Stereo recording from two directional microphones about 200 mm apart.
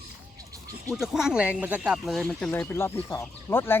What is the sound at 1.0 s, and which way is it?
Speech, centre (ahead or behind).